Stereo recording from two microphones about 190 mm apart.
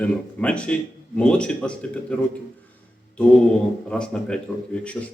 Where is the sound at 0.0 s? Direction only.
5° left (ahead or behind).